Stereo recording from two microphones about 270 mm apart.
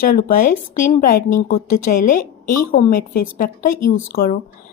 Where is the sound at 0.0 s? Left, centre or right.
Left.